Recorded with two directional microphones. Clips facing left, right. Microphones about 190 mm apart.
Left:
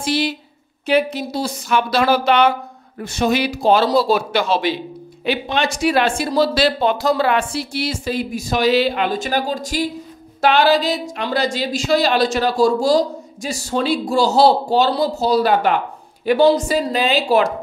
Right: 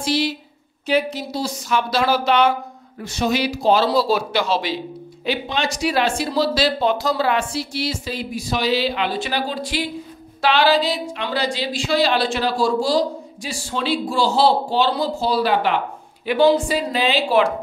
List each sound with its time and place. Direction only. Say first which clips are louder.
0.0 s a woman's voice: left 1 dB; 55° left (ahead or behind)